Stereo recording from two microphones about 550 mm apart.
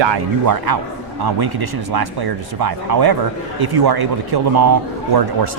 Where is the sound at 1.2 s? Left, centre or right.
Right.